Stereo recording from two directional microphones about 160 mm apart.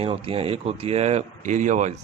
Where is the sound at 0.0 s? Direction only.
35° right (ahead or behind).